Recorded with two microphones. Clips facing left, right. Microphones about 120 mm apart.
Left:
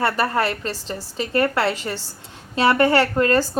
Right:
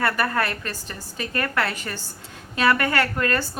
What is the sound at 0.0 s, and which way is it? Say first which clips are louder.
A woman's voice: left 3 dB; 25° left (ahead or behind).